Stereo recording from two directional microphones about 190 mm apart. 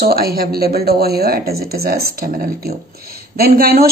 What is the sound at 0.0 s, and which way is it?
Speech, 55° right (ahead or behind).